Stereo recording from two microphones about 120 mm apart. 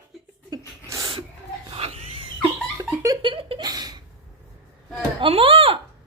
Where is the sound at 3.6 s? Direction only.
35° right (ahead or behind).